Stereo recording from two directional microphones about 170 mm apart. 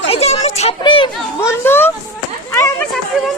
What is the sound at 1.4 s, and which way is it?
Speech, 15° left (ahead or behind).